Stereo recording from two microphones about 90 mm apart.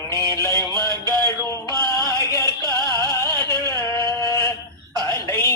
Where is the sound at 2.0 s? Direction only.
40° left (ahead or behind).